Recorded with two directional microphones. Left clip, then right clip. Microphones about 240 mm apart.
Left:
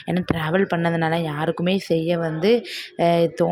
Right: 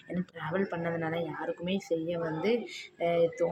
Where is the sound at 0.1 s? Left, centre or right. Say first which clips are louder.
Left 13 dB; left.